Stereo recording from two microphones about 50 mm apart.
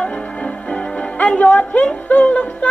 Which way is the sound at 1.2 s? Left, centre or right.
Left.